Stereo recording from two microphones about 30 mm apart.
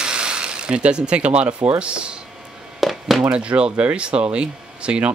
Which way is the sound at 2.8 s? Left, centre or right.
Centre.